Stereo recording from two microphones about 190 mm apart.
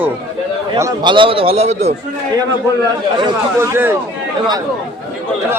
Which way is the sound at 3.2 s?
15° right (ahead or behind).